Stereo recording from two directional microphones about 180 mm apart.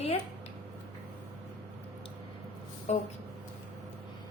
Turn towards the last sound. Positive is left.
turn(degrees=40)  # may be behind; listen again after turning